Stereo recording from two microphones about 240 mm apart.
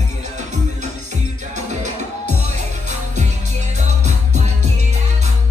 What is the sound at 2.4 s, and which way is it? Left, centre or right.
Music, right.